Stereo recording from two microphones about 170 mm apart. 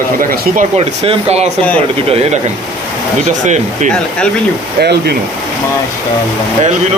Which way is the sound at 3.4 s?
45° right (ahead or behind).